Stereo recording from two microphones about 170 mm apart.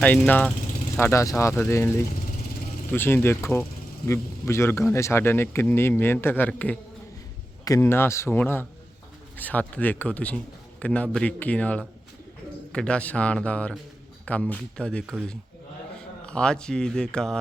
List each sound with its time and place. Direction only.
0.0 s speech: 10° left (ahead or behind)
16.2 s speech: 5° left (ahead or behind)